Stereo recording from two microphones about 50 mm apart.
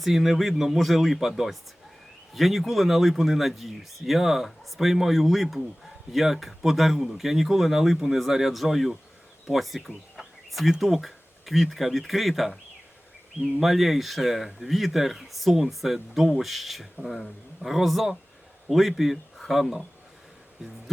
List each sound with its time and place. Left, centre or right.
0.0 s speech: centre
2.3 s speech: centre